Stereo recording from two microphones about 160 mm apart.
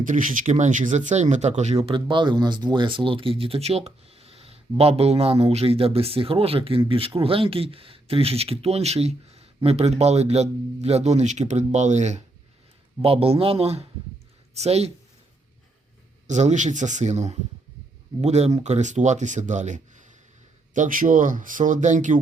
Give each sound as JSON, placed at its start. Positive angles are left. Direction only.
{"t": 0.0, "sound": "speech", "side_deg": -55}
{"t": 16.2, "sound": "speech", "side_deg": -45}